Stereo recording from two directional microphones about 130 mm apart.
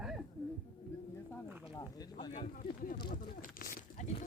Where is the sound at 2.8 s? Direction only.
90° left.